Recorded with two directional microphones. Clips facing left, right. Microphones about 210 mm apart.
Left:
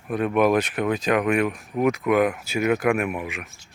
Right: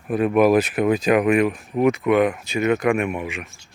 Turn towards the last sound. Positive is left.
turn(degrees=0)  # may be behind; listen again after turning